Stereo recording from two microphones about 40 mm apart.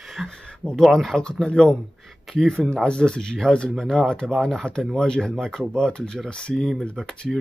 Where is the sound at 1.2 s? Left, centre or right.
Left.